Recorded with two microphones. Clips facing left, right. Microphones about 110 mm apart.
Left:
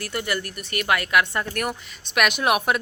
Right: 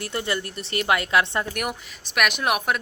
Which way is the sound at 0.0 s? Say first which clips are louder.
Even; 25° right (ahead or behind).